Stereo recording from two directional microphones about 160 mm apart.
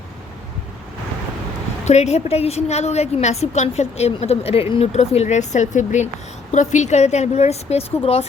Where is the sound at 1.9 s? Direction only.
45° left (ahead or behind).